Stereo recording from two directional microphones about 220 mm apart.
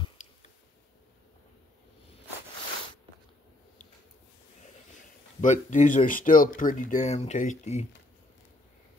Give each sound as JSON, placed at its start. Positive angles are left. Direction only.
{"t": 5.4, "sound": "speech", "side_deg": 35}